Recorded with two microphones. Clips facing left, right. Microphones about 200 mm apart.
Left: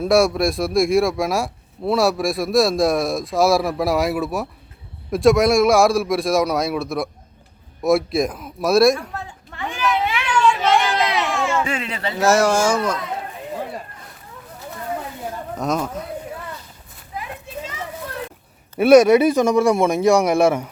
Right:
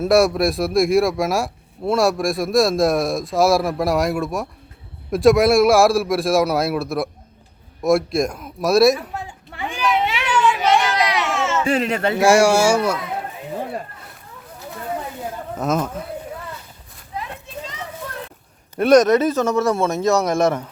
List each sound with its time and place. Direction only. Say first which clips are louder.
0.0 s speech: right 1 dB; centre (ahead or behind)
9.1 s children playing: right 1 dB; 15° right (ahead or behind)
11.6 s speech: right 6 dB; 40° right (ahead or behind)
12.1 s speech: right 2 dB; 10° right (ahead or behind)
15.5 s speech: right 1 dB; 5° right (ahead or behind)
18.8 s speech: left 2 dB; 10° left (ahead or behind)